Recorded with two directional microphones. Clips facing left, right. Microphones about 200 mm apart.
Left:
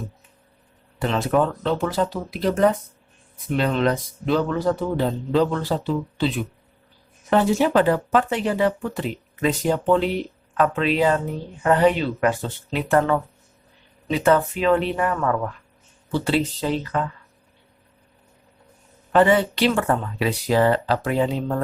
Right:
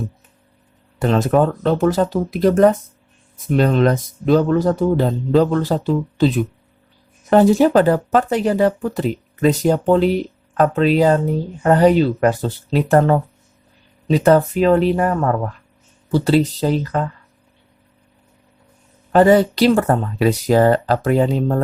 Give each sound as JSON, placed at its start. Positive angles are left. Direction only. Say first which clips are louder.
{"t": 0.9, "sound": "speech", "louder": "right 5 dB", "side_deg": -45}
{"t": 19.1, "sound": "speech", "louder": "right 5 dB", "side_deg": -40}